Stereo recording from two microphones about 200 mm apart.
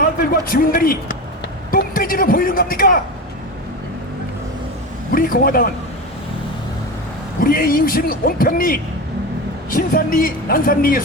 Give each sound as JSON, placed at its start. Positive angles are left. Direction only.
{"t": 0.5, "sound": "a man's voice", "side_deg": 45}
{"t": 5.1, "sound": "speech", "side_deg": 45}
{"t": 7.4, "sound": "speech", "side_deg": 45}